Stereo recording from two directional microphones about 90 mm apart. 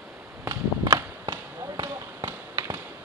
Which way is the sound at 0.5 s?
40° right (ahead or behind).